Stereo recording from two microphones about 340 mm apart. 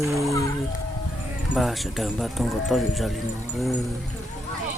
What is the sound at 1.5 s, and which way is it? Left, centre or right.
Speech, centre.